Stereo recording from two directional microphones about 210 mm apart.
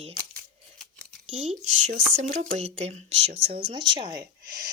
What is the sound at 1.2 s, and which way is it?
Speech, 30° right (ahead or behind).